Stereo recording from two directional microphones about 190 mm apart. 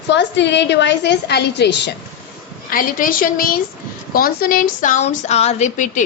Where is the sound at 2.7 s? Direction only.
50° left (ahead or behind).